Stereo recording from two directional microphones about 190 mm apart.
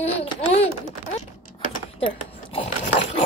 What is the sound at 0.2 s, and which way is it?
Babbling, 30° left (ahead or behind).